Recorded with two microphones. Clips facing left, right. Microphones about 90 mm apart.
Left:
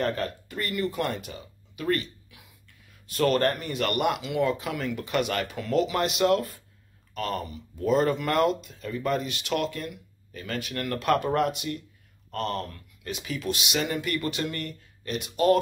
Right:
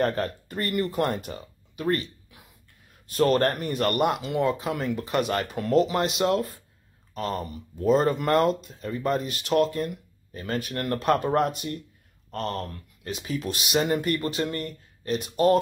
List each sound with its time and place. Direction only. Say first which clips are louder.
0.0 s speech: right 3 dB; 40° right (ahead or behind)
1.9 s a sound: right 1 dB; 35° right (ahead or behind)
3.1 s speech: right 2 dB; 35° right (ahead or behind)